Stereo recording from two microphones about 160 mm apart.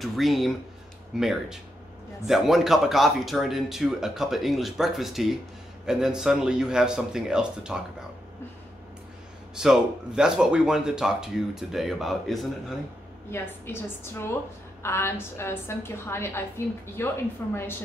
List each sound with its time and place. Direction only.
0.0 s speech: centre (ahead or behind)
9.6 s speech: 5° right (ahead or behind)
13.3 s a woman's voice: 15° left (ahead or behind)